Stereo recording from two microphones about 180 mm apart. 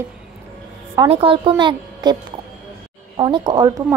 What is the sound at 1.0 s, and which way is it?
A woman's voice, 30° right (ahead or behind).